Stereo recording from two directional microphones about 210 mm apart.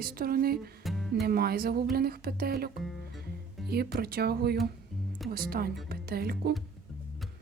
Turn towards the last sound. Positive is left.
turn(degrees=-45)  # may be behind; listen again after turning